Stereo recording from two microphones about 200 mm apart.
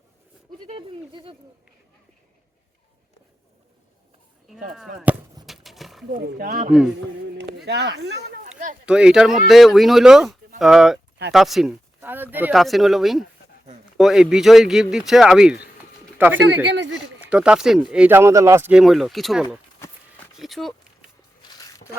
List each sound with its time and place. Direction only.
0.6 s speech: 25° right (ahead or behind)
4.7 s speech: 5° right (ahead or behind)
5.5 s roaring cats: centre (ahead or behind)
6.1 s speech: 45° right (ahead or behind)
7.3 s a sound: 60° right (ahead or behind)
8.4 s a sound: 40° right (ahead or behind)
8.9 s speech: 5° right (ahead or behind)
16.7 s speech: 60° right (ahead or behind)
17.2 s speech: 5° right (ahead or behind)